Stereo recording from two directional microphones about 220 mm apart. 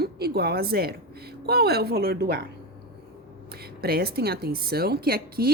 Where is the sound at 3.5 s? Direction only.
45° right (ahead or behind).